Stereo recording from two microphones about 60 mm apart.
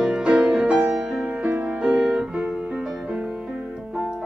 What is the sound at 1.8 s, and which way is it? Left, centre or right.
Music, centre.